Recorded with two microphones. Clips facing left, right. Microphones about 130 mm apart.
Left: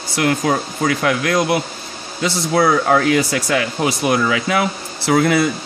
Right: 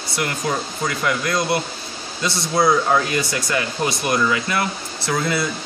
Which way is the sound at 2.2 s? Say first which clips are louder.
Left 3 dB; 65° left (ahead or behind).